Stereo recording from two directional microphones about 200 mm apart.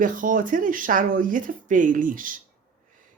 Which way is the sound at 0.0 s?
40° right (ahead or behind).